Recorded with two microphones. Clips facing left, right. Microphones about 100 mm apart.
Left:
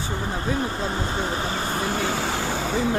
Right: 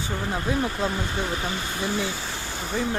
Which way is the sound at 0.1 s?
25° left (ahead or behind).